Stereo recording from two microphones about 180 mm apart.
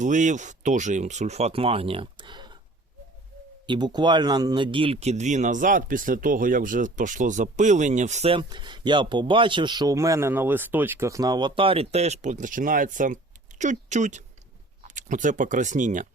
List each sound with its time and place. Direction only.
0.0 s speech: 45° right (ahead or behind); by 2.6 s 25° right (ahead or behind)
3.7 s speech: 25° right (ahead or behind); by 16.0 s 45° right (ahead or behind)